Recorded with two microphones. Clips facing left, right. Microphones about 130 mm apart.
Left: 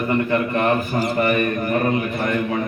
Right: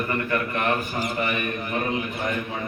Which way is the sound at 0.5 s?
40° left (ahead or behind).